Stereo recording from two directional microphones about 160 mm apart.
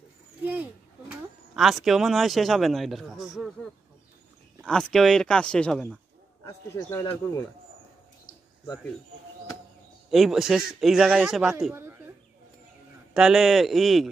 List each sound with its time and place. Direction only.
0.4 s speech: 10° right (ahead or behind)
4.6 s speech: 5° left (ahead or behind)
6.4 s speech: 20° left (ahead or behind)
10.1 s speech: centre (ahead or behind)
13.1 s speech: 5° right (ahead or behind)